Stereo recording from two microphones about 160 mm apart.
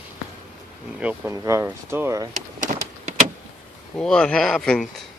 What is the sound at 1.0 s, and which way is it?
Speech, 15° right (ahead or behind).